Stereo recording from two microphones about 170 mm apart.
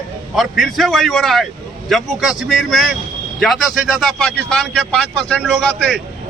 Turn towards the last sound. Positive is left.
turn(degrees=0)  # may be behind; listen again after turning